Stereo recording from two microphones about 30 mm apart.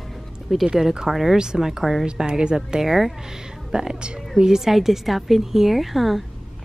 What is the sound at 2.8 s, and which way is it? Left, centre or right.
Speech, centre.